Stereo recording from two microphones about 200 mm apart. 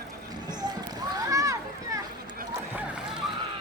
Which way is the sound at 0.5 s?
20° right (ahead or behind).